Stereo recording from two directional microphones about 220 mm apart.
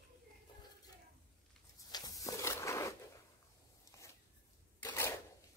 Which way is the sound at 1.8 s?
15° left (ahead or behind).